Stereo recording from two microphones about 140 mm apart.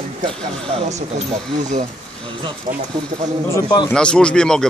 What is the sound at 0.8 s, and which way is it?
Speech, 55° right (ahead or behind).